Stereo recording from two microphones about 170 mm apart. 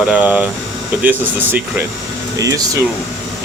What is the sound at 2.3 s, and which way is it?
Speech, 20° right (ahead or behind).